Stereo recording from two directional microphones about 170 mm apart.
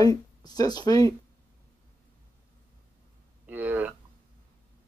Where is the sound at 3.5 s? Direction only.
10° right (ahead or behind).